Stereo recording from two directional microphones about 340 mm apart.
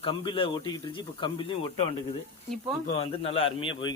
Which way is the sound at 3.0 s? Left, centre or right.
Centre.